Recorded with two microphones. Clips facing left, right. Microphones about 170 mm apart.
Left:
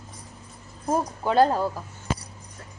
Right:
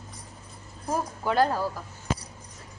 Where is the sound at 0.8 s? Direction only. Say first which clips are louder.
Left 3 dB; 20° left (ahead or behind).